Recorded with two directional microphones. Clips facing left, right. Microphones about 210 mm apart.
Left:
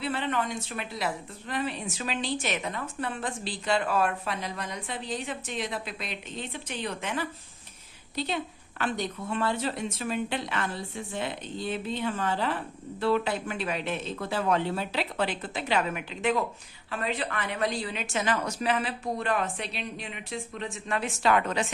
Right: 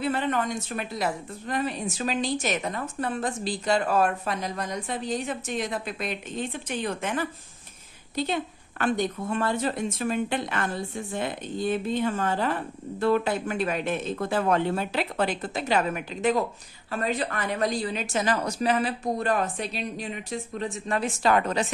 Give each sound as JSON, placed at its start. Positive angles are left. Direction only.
{"t": 0.0, "sound": "a woman's voice", "side_deg": -45}